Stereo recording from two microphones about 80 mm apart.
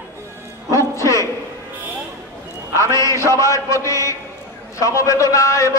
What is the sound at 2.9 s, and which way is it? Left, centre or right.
A man's voice, left.